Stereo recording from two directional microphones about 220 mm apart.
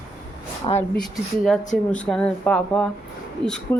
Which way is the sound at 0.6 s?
20° left (ahead or behind).